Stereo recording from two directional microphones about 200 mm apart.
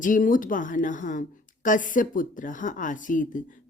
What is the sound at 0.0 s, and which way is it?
Speech, 40° left (ahead or behind).